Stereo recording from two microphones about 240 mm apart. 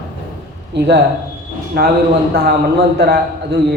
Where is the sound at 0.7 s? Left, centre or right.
Right.